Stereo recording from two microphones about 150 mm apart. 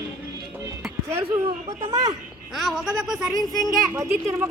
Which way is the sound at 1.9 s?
25° right (ahead or behind).